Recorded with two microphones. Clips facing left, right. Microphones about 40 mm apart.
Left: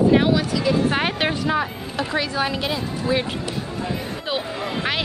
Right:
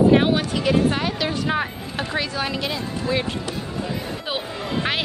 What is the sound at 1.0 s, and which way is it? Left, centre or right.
Speech, left.